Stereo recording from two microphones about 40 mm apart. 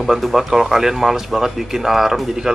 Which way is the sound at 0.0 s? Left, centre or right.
Centre.